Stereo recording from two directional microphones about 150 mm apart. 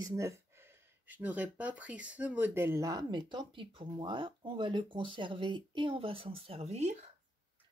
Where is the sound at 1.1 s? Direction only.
10° right (ahead or behind); by 6.9 s 45° right (ahead or behind).